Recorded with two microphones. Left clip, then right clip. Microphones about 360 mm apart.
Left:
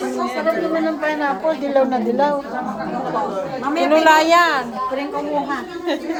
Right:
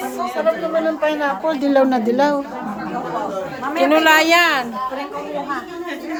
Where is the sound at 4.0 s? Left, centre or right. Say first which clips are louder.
Left 1 dB; centre.